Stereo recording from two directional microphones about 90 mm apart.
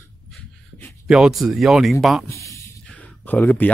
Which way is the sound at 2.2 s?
35° left (ahead or behind).